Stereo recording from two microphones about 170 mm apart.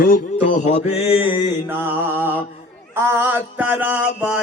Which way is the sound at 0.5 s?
40° left (ahead or behind).